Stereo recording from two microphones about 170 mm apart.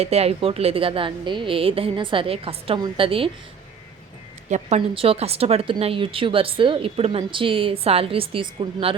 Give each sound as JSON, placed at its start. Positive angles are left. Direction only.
{"t": 0.0, "sound": "speech", "side_deg": -35}
{"t": 4.4, "sound": "speech", "side_deg": -40}